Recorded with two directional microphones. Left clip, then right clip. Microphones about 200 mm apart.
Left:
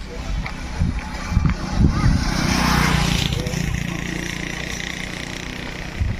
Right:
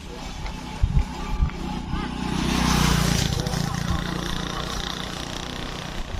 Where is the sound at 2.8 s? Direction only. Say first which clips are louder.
Left 3 dB; 60° right (ahead or behind).